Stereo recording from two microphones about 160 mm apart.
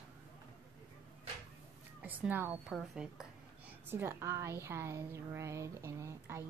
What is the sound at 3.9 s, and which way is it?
A woman's voice, 15° right (ahead or behind).